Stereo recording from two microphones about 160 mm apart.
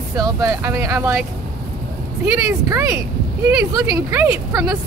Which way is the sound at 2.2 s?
20° right (ahead or behind).